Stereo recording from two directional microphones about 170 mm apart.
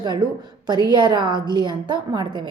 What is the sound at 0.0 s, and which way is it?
A woman's voice, 25° right (ahead or behind).